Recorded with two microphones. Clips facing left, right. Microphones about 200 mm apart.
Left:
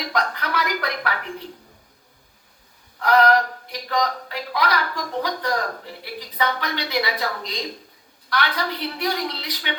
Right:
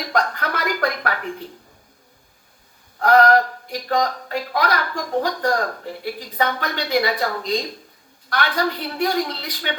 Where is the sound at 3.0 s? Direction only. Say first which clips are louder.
Right 3 dB; 45° right (ahead or behind).